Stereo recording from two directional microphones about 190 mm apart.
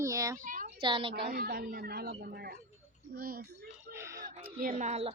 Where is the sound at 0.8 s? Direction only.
25° right (ahead or behind).